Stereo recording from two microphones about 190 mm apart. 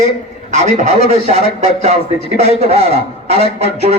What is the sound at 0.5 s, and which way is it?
A man's voice, 35° right (ahead or behind).